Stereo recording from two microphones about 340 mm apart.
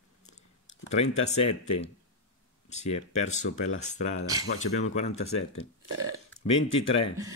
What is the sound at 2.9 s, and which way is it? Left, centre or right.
Speech, left.